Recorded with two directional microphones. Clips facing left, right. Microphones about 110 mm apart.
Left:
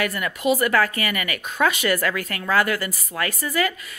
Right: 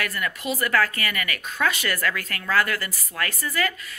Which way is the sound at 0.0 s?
15° left (ahead or behind).